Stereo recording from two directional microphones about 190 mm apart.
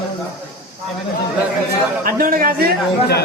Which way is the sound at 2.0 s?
50° right (ahead or behind).